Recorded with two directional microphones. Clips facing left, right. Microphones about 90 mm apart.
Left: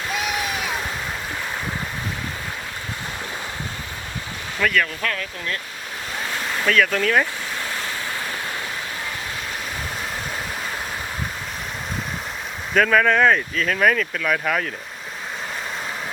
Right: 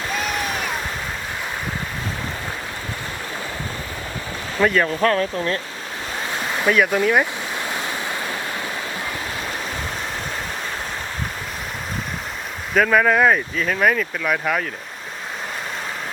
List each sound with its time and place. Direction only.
0.2 s a sound: 5° left (ahead or behind)
4.6 s speech: 30° right (ahead or behind)
6.7 s speech: 15° right (ahead or behind)
12.7 s speech: 5° right (ahead or behind)